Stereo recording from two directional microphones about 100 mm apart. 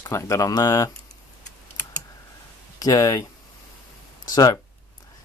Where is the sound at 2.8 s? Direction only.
35° left (ahead or behind).